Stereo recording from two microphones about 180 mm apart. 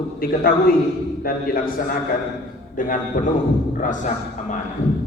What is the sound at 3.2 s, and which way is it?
Speech, 45° left (ahead or behind).